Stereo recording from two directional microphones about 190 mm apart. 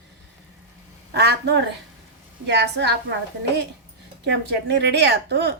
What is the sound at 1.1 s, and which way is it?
A woman's voice, 60° right (ahead or behind).